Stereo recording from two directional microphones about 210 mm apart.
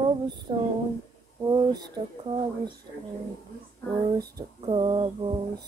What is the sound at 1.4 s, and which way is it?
Speech, 20° right (ahead or behind).